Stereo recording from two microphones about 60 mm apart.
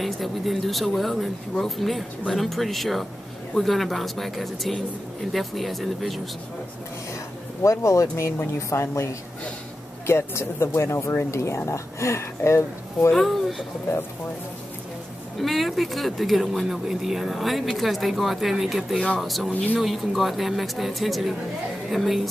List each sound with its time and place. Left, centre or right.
0.0 s speech: centre
7.6 s speech: left
10.0 s speech: left
13.1 s speech: centre
15.4 s speech: centre